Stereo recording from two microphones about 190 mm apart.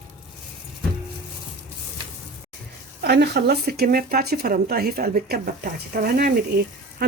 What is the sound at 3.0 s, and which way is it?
Speech, 60° right (ahead or behind).